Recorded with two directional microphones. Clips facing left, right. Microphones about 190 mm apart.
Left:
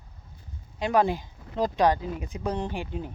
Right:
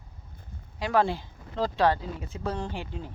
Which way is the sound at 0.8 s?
15° left (ahead or behind).